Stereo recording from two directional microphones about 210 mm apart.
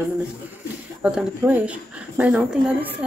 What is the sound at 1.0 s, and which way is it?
Speech, 5° right (ahead or behind).